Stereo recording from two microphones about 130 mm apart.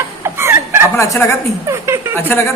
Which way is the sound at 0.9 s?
20° left (ahead or behind).